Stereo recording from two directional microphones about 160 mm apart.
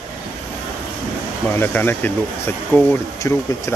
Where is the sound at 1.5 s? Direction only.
10° left (ahead or behind).